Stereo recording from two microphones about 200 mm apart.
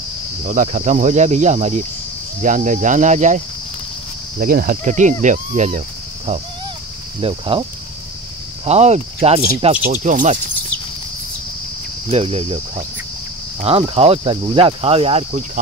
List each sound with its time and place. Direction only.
0.5 s speech: 40° right (ahead or behind)
4.4 s cricket: 45° right (ahead or behind)
5.2 s speech: 40° right (ahead or behind)
8.6 s speech: 35° right (ahead or behind)
12.1 s speech: 30° right (ahead or behind)